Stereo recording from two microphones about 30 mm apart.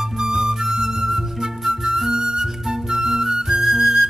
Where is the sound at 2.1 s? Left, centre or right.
Right.